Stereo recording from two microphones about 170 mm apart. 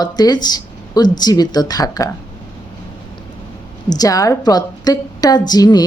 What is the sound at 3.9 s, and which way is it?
A woman's voice, 20° left (ahead or behind).